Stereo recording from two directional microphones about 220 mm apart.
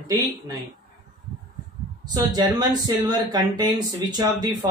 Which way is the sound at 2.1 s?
20° right (ahead or behind).